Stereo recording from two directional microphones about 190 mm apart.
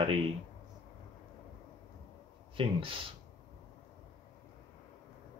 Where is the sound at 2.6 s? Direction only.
30° right (ahead or behind).